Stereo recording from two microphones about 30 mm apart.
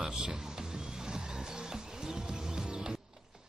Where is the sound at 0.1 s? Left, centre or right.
Centre.